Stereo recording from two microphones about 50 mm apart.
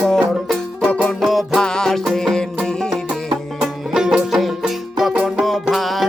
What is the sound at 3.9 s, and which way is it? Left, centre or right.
Music, centre.